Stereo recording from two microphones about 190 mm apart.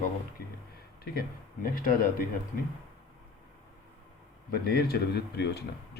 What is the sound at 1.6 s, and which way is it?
Speech, 50° left (ahead or behind).